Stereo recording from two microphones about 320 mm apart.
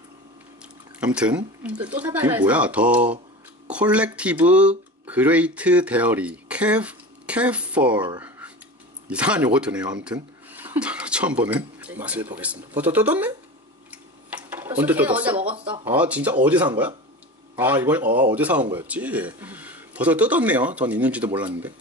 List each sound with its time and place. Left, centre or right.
0.9 s speech: centre
13.8 s tick-tock: centre
15.3 s speech: centre
15.7 s speech: centre